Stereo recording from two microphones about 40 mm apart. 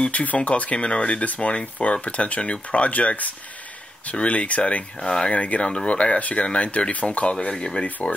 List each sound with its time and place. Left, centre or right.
0.1 s speech: left
5.0 s speech: left
7.4 s speech: centre